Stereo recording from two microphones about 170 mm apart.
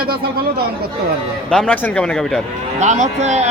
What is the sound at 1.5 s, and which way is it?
Speech, 5° left (ahead or behind).